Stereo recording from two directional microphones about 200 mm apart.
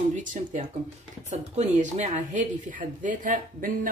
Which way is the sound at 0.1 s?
40° right (ahead or behind).